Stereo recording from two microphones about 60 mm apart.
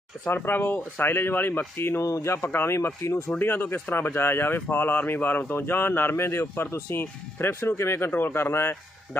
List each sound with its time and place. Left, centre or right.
0.3 s speech: left
2.0 s speech: left
3.3 s speech: left
8.1 s speech: left